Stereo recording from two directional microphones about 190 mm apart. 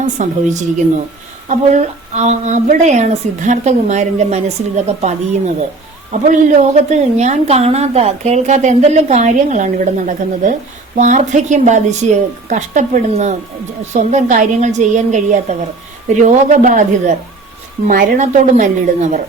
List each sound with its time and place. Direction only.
0.0 s a woman's voice: 40° right (ahead or behind)